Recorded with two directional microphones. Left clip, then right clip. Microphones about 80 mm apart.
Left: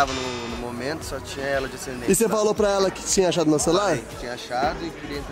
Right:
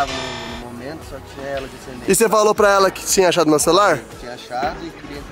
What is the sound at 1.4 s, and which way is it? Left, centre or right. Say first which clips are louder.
Speech: left 1 dB; centre.